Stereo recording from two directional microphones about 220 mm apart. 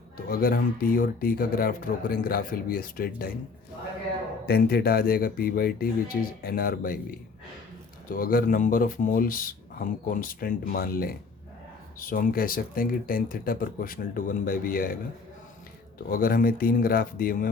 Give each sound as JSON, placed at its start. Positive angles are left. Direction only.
{"t": 0.3, "sound": "speech", "side_deg": 40}
{"t": 4.4, "sound": "speech", "side_deg": 45}
{"t": 16.0, "sound": "speech", "side_deg": 40}